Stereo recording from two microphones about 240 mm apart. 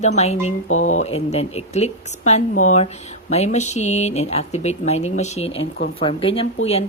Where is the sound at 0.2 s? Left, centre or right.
Left.